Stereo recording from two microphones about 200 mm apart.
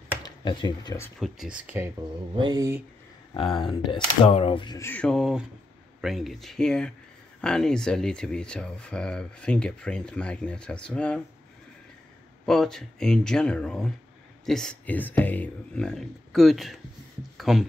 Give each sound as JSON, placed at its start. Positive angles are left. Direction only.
{"t": 0.2, "sound": "speech", "side_deg": 20}
{"t": 1.7, "sound": "speech", "side_deg": -10}
{"t": 2.3, "sound": "speech", "side_deg": -20}
{"t": 3.3, "sound": "speech", "side_deg": 25}
{"t": 12.4, "sound": "speech", "side_deg": 0}